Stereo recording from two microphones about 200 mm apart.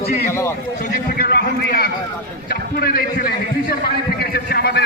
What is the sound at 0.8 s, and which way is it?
A man's voice, 45° left (ahead or behind).